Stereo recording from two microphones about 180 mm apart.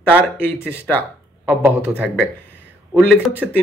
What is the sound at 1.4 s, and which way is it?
A man's voice, 10° right (ahead or behind).